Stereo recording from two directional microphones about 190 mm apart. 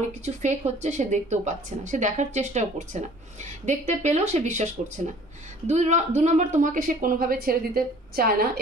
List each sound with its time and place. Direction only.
0.2 s a woman's voice: 35° right (ahead or behind); by 8.5 s 50° right (ahead or behind)